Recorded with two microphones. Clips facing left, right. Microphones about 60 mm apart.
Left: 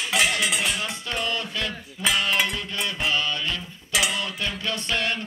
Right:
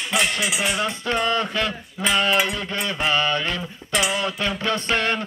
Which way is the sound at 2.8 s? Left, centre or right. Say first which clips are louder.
Right 4 dB; right.